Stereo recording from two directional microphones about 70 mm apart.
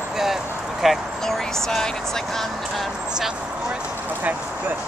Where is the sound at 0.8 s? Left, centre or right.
Centre.